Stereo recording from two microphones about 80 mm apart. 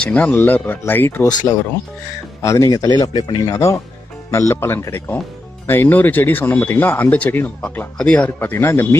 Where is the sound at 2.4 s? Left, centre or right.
Left.